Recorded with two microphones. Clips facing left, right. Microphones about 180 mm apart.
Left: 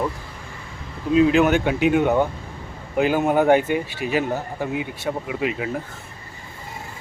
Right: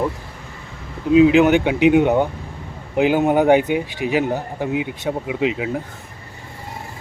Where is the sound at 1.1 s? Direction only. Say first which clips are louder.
Right 4 dB; 15° right (ahead or behind).